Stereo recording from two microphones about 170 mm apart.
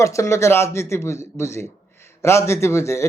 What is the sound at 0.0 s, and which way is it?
Speech, 20° left (ahead or behind).